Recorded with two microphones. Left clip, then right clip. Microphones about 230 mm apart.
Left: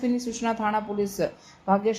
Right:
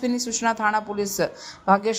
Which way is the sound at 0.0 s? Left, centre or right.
Centre.